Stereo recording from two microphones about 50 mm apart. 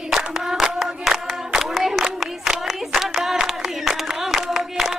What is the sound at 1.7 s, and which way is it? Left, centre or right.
Clapping, centre.